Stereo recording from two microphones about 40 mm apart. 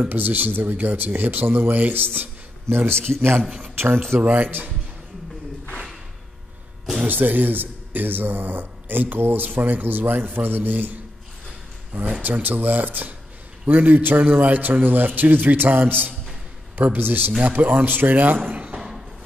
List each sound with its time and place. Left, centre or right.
0.0 s a man's voice: right
2.9 s a man's voice: right
3.4 s speech: centre
3.7 s speech: right
4.2 s a man's voice: right
7.1 s a man's voice: right
18.5 s a sound: right
18.8 s a sound: centre